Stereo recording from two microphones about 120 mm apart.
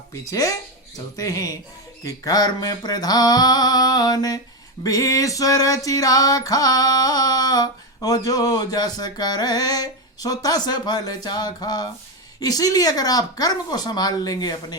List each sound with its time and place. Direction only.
0.3 s speech: 25° left (ahead or behind)
2.0 s music: 30° left (ahead or behind)